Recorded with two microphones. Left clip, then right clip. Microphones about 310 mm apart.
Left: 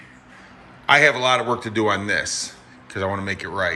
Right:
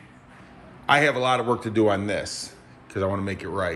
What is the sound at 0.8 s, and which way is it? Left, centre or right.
Speech, centre.